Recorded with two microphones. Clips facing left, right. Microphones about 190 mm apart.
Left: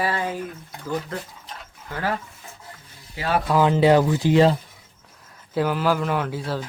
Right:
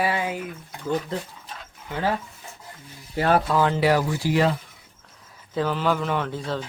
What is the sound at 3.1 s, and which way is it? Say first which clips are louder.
Speech: right 5 dB; 50° right (ahead or behind).